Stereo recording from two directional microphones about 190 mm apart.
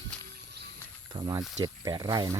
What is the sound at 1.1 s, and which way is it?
Speech, 20° right (ahead or behind).